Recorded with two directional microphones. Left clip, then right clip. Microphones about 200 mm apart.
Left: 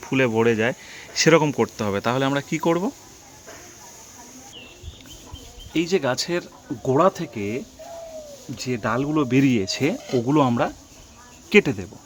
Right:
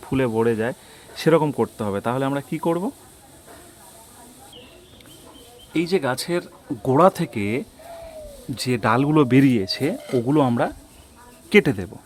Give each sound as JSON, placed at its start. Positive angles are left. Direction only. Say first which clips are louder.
{"t": 0.0, "sound": "speech", "louder": "left 1 dB", "side_deg": -5}
{"t": 5.7, "sound": "speech", "louder": "even", "side_deg": -10}
{"t": 6.8, "sound": "speech", "louder": "right 2 dB", "side_deg": -25}
{"t": 9.3, "sound": "speech", "louder": "right 2 dB", "side_deg": -10}